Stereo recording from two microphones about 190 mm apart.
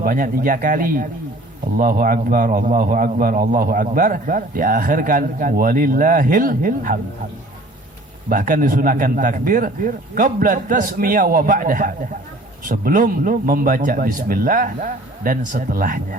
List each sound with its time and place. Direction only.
0.0 s a man's voice: 50° right (ahead or behind)
8.3 s a man's voice: 45° right (ahead or behind)